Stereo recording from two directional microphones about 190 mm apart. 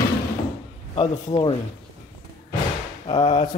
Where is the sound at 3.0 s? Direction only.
35° left (ahead or behind).